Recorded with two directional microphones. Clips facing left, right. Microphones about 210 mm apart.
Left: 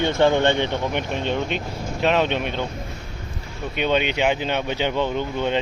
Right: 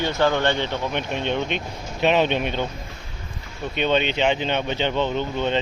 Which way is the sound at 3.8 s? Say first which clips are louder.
Even; 10° left (ahead or behind).